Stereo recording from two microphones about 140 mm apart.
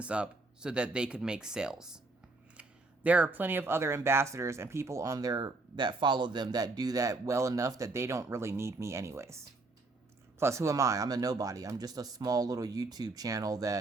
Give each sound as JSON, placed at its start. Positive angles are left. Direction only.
{"t": 0.0, "sound": "speech", "side_deg": -10}
{"t": 10.4, "sound": "speech", "side_deg": -20}